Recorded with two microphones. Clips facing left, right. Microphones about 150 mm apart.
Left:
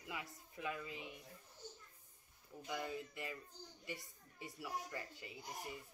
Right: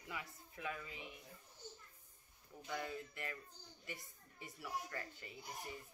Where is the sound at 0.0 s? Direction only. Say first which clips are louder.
Left 1 dB; 20° left (ahead or behind).